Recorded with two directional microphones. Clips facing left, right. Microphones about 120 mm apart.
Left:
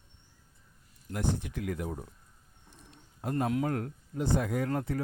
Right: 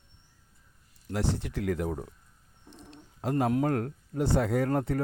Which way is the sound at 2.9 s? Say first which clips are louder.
Right 4 dB; 75° right (ahead or behind).